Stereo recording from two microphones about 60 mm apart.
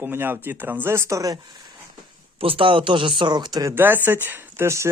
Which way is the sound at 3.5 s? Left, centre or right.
Right.